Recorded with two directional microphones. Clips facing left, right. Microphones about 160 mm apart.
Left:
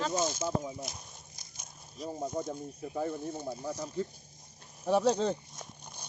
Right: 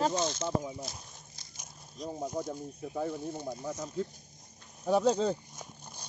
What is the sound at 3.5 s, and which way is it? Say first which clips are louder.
Speech: even; 10° left (ahead or behind).